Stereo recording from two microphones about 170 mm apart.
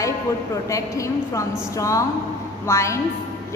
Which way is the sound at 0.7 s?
20° left (ahead or behind).